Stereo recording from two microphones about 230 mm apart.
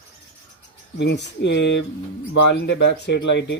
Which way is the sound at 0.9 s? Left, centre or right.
Left.